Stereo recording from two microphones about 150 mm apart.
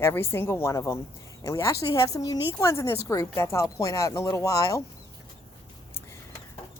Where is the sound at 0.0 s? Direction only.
15° left (ahead or behind).